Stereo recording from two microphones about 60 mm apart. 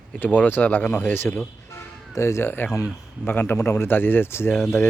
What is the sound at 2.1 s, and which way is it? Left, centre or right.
Speech, left.